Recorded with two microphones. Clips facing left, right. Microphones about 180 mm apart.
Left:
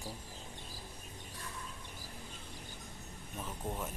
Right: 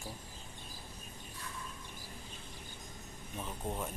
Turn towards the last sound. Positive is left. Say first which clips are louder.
# right 1 dB
turn(degrees=-10)  # may be behind; listen again after turning